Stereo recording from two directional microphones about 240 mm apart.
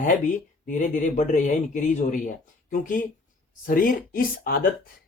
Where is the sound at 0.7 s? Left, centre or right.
Left.